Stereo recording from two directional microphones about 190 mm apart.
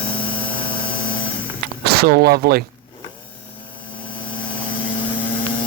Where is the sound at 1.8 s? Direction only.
55° right (ahead or behind).